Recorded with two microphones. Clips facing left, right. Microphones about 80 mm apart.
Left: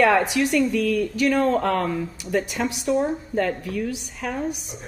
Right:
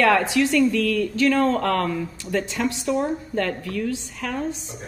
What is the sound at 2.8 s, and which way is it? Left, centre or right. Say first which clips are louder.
A woman's voice: left 1 dB; centre.